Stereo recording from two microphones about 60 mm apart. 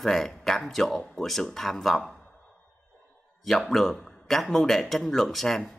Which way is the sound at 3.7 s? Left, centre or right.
Centre.